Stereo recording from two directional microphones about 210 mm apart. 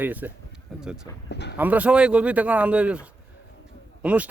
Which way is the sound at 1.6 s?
5° right (ahead or behind).